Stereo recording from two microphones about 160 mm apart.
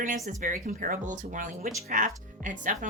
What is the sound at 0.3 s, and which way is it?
A woman's voice, 55° right (ahead or behind).